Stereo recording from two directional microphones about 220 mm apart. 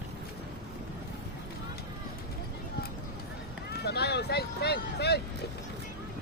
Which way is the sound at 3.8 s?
50° left (ahead or behind).